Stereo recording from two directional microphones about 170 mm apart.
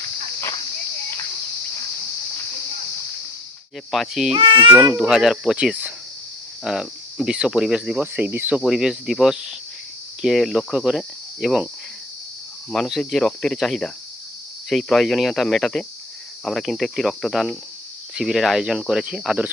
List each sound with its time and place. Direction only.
3.9 s speech: centre (ahead or behind)
4.4 s speech: 30° right (ahead or behind)
4.7 s speech: 5° right (ahead or behind)
12.7 s speech: centre (ahead or behind)